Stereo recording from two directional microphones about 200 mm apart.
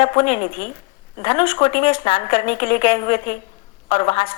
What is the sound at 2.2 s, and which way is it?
A woman's voice, 40° left (ahead or behind).